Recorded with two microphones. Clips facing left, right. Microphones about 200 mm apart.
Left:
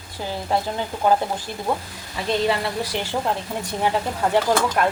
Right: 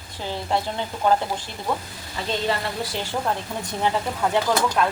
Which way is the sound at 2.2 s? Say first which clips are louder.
Left 4 dB; 15° left (ahead or behind).